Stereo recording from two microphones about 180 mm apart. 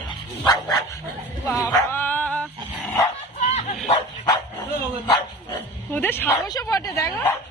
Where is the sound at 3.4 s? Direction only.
40° left (ahead or behind).